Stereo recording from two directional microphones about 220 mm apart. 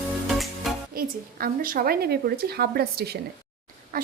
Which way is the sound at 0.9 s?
40° right (ahead or behind).